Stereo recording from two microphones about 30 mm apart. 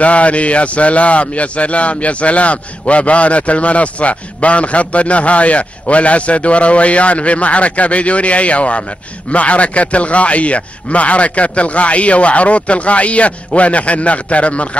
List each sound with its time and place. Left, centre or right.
0.0 s a man's voice: left